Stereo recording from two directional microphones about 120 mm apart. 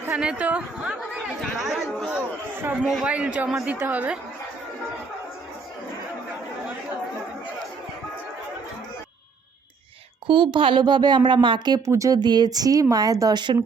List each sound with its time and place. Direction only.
0.0 s a woman's voice: 5° right (ahead or behind)
10.2 s speech: 45° right (ahead or behind)
11.9 s speech: 25° right (ahead or behind)